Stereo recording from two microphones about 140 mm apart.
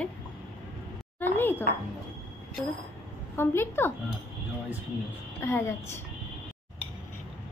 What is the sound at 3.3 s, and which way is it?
Speech, 15° left (ahead or behind).